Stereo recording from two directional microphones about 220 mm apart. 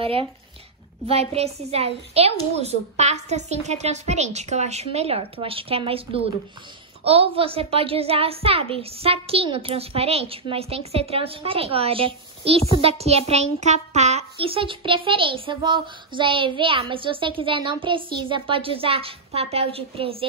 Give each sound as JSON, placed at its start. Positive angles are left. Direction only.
{"t": 0.0, "sound": "a child's voice", "side_deg": -25}